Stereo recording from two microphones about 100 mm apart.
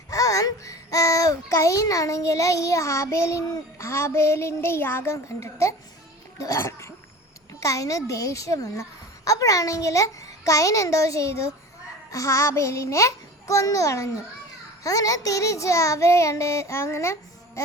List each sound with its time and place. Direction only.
0.1 s a child's voice: 35° left (ahead or behind)